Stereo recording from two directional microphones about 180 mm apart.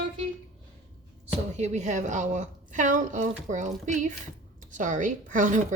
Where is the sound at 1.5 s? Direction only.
40° right (ahead or behind).